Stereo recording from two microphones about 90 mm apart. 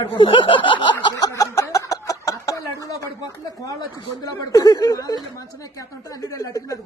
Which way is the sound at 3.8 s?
45° left (ahead or behind).